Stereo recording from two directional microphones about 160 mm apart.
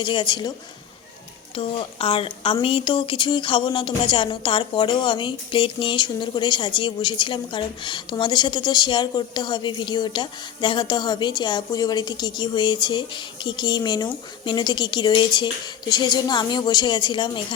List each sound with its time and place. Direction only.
0.0 s speech: 30° left (ahead or behind)
1.5 s speech: 35° left (ahead or behind)